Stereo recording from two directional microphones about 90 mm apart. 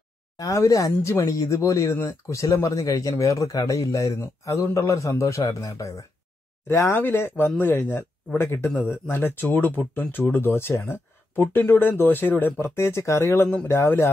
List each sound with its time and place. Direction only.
0.4 s speech: 40° left (ahead or behind)